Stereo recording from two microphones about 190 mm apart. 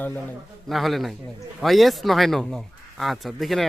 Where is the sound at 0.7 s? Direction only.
Centre (ahead or behind).